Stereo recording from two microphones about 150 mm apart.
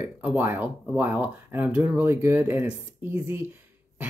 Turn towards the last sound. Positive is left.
turn(degrees=-10)  # may be behind; listen again after turning